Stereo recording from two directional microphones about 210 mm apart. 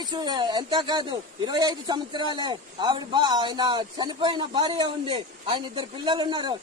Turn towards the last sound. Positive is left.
turn(degrees=-20)  # may be behind; listen again after turning